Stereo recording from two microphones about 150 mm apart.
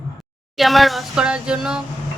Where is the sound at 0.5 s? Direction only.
Centre (ahead or behind).